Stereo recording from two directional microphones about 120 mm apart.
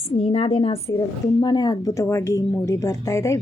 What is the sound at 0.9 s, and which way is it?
Speech, 35° left (ahead or behind).